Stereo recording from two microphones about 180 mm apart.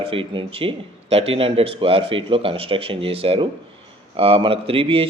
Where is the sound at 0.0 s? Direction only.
30° right (ahead or behind).